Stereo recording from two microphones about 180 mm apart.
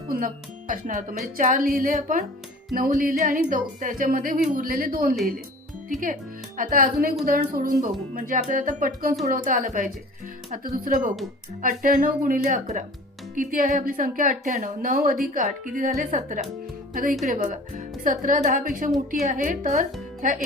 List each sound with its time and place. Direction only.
0.7 s speech: 45° right (ahead or behind)
6.6 s speech: 50° right (ahead or behind)